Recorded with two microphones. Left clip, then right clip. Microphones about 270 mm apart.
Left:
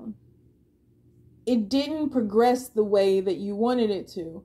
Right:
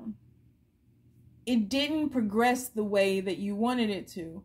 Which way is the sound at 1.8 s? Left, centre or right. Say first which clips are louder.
Left 3 dB; right.